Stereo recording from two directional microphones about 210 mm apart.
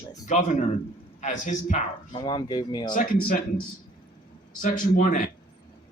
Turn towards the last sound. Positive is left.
turn(degrees=40)  # may be behind; listen again after turning